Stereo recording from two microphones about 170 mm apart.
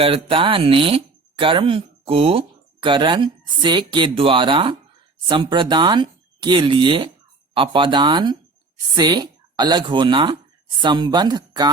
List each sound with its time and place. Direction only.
0.0 s speech: 30° right (ahead or behind)